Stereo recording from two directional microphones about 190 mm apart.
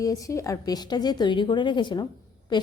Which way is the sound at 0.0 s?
15° left (ahead or behind).